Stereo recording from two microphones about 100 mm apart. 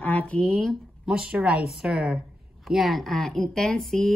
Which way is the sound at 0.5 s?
Centre (ahead or behind).